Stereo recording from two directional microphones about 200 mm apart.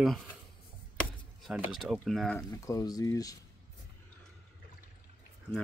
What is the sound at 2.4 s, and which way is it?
Speech, 15° left (ahead or behind).